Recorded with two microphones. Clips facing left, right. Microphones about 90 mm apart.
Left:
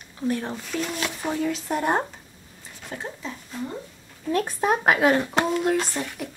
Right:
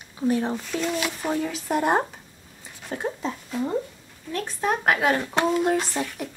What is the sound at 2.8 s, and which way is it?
Speech, 20° right (ahead or behind).